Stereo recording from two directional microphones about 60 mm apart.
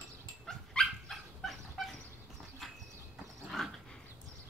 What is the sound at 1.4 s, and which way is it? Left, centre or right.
Fowl, centre.